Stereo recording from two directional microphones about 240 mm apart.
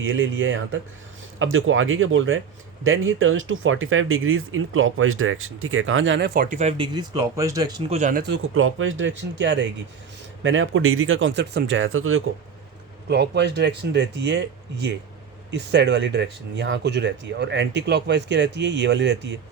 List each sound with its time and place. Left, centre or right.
0.0 s speech: right
8.3 s speech: right
13.1 s speech: right